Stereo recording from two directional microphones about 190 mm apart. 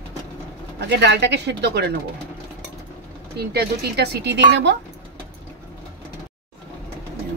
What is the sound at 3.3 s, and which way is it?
Speech, 55° right (ahead or behind).